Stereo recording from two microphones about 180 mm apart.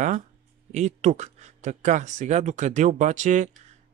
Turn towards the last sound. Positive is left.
turn(degrees=-40)  # may be behind; listen again after turning